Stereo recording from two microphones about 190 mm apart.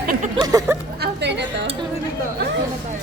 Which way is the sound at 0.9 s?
60° right (ahead or behind).